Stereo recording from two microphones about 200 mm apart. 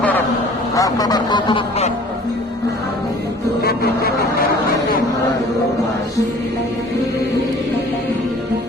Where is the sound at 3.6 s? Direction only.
50° left (ahead or behind).